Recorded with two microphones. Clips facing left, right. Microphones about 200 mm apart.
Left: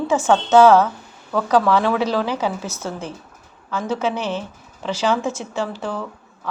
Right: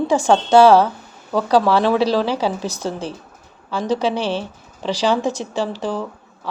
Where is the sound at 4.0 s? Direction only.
30° right (ahead or behind).